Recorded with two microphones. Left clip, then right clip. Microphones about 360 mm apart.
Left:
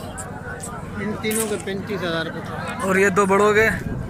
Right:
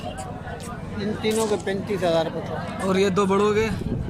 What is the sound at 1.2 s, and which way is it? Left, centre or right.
Speech, right.